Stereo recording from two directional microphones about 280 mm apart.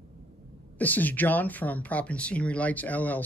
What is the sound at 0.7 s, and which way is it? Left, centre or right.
Speech, centre.